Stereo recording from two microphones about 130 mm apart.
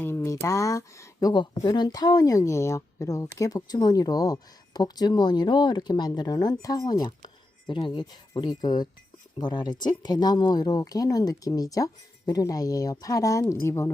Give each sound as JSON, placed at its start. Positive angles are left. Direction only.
{"t": 0.0, "sound": "speech", "side_deg": 15}